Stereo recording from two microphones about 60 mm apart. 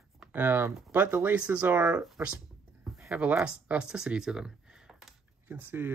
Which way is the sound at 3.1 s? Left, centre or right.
Right.